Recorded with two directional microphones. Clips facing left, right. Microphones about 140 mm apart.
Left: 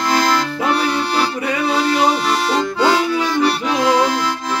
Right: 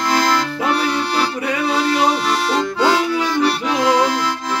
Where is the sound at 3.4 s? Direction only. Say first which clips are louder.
Even; 20° left (ahead or behind).